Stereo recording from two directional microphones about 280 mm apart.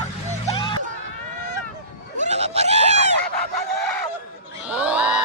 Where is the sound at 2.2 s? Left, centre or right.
Right.